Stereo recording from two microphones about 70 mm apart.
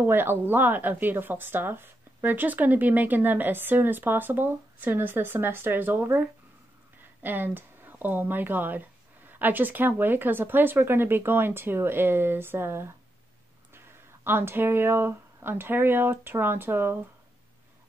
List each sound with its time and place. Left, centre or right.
0.0 s speech: right